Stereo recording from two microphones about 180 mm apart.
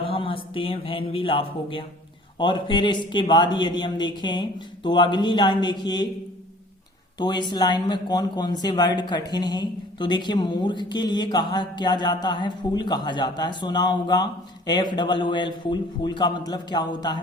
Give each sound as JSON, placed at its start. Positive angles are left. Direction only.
{"t": 0.0, "sound": "music", "side_deg": 30}
{"t": 2.4, "sound": "speech", "side_deg": 25}
{"t": 7.2, "sound": "speech", "side_deg": 25}